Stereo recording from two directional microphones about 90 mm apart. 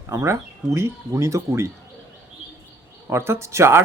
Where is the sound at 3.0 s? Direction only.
30° right (ahead or behind).